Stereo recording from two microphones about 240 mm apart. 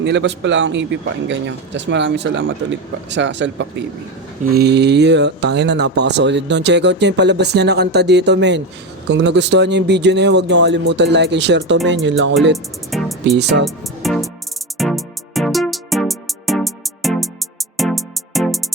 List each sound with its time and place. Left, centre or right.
0.0 s speech: right
12.9 s music: centre
13.3 s speech: right
13.7 s music: centre